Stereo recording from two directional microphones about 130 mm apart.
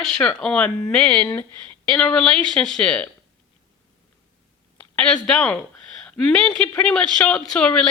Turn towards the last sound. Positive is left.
turn(degrees=5)  # may be behind; listen again after turning